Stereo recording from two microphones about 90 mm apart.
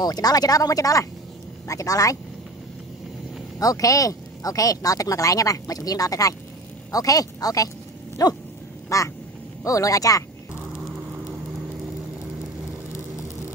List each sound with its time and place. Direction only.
0.0 s speech: 45° left (ahead or behind)
3.5 s speech: 40° left (ahead or behind)
8.8 s quack: 35° left (ahead or behind)
9.6 s speech: 40° left (ahead or behind)